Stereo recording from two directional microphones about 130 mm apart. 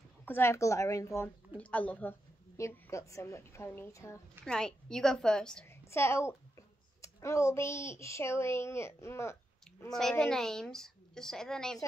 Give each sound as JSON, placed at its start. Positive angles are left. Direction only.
{"t": 0.2, "sound": "a woman's voice", "side_deg": 20}
{"t": 1.6, "sound": "a woman's voice", "side_deg": 10}
{"t": 2.5, "sound": "a woman's voice", "side_deg": 20}
{"t": 4.5, "sound": "a woman's voice", "side_deg": 5}
{"t": 5.9, "sound": "a woman's voice", "side_deg": 20}
{"t": 9.9, "sound": "a woman's voice", "side_deg": 5}